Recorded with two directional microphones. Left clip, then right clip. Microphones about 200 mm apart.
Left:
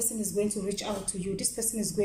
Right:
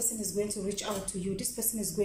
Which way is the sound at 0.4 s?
10° left (ahead or behind).